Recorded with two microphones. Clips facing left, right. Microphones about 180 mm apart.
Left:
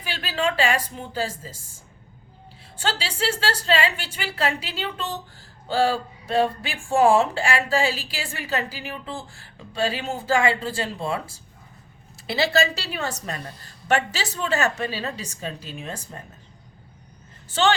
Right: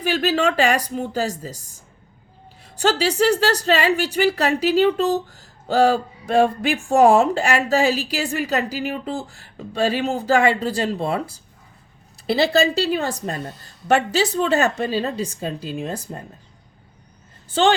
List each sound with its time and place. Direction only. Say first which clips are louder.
0.0 s a woman's voice: right 7 dB; 45° right (ahead or behind)
2.7 s speech: right 10 dB; 40° right (ahead or behind)
12.2 s speech: right 5 dB; 35° right (ahead or behind)